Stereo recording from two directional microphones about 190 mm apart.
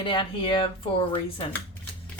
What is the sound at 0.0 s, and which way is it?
Speech, 25° left (ahead or behind).